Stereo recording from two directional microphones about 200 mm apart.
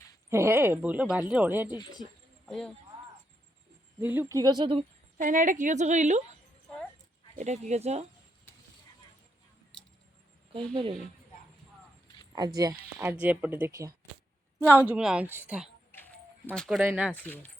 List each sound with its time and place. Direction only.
0.3 s speech: 10° right (ahead or behind)
2.5 s speech: centre (ahead or behind)
4.0 s speech: 10° right (ahead or behind); by 4.9 s 25° right (ahead or behind)
5.1 s a woman's voice: 40° right (ahead or behind)
7.3 s a woman's voice: 35° right (ahead or behind)
12.5 s speech: 15° right (ahead or behind)
15.9 s music: 10° left (ahead or behind)
16.6 s speech: centre (ahead or behind)
17.2 s speech: 10° left (ahead or behind)